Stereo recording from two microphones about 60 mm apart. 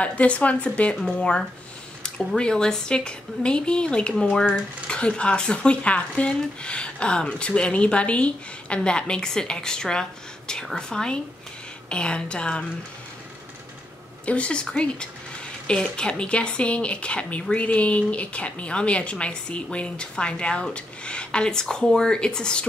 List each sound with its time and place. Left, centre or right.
0.0 s speech: left
2.0 s speech: centre
14.2 s speech: left